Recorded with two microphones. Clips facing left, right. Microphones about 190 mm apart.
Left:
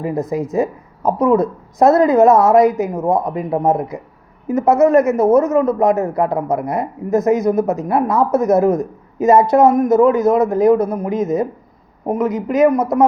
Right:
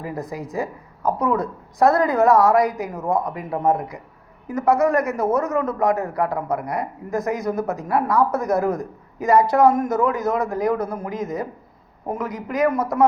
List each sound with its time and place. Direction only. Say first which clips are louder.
0.0 s speech: left 9 dB; 20° left (ahead or behind)